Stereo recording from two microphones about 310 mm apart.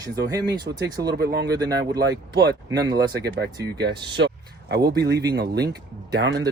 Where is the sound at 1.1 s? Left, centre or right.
Right.